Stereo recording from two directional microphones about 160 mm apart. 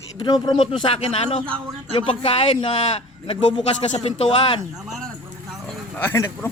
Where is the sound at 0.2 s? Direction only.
25° left (ahead or behind).